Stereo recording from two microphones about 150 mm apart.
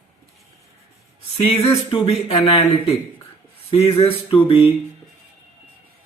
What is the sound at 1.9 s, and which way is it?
Speech, 40° left (ahead or behind).